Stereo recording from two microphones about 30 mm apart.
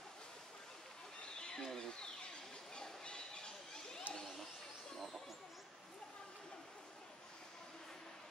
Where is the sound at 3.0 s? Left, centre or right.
Left.